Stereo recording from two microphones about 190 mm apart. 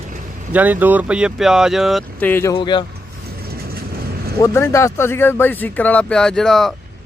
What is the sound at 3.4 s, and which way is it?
Vehicle, 50° right (ahead or behind).